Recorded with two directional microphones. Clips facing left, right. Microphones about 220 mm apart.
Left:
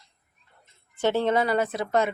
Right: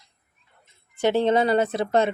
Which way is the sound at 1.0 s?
15° right (ahead or behind).